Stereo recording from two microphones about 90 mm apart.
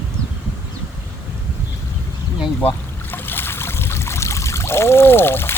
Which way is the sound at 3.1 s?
25° left (ahead or behind).